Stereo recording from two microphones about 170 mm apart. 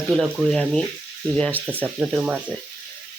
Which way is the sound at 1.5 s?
10° right (ahead or behind).